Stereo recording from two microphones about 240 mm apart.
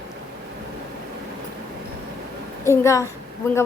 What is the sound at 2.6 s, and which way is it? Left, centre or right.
Speech, centre.